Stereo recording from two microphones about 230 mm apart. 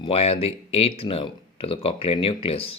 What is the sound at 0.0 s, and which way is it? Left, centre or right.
Speech, left.